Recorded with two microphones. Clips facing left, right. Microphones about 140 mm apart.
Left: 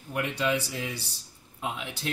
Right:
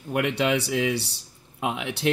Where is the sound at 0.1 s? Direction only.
70° right (ahead or behind).